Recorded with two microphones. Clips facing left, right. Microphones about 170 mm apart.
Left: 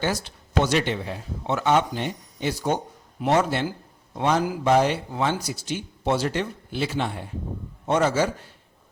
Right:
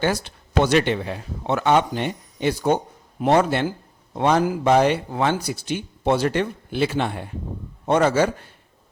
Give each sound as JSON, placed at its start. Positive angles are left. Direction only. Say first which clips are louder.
{"t": 0.0, "sound": "speech", "louder": "right 4 dB", "side_deg": -60}